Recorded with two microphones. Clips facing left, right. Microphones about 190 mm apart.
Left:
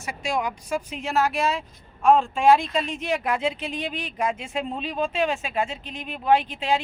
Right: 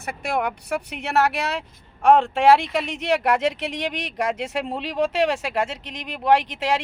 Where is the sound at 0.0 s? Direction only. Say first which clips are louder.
Right 2 dB; 60° right (ahead or behind).